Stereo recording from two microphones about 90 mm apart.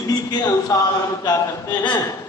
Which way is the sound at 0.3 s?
45° left (ahead or behind).